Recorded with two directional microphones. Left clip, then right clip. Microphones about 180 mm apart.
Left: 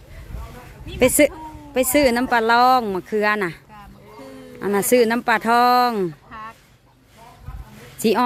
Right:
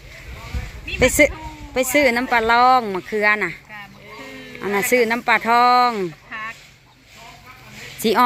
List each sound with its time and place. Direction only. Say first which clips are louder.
0.9 s a woman's voice: right 1 dB; 20° left (ahead or behind)
4.9 s speech: even; 25° left (ahead or behind)
7.9 s speech: right 1 dB; 20° left (ahead or behind)